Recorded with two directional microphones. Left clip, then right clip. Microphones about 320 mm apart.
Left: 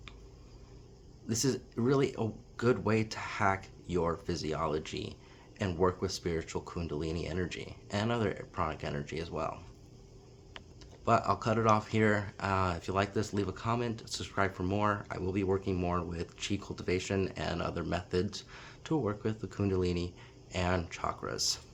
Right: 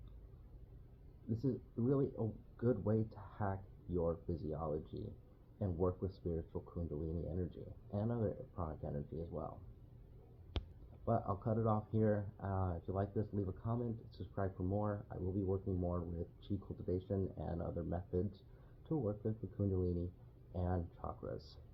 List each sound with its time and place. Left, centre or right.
1.3 s speech: left
11.0 s speech: left